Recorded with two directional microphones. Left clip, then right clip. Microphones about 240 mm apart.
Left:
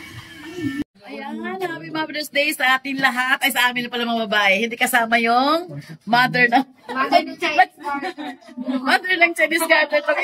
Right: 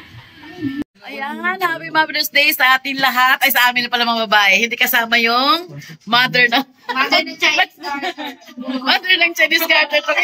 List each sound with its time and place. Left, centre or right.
1.0 s a man's voice: centre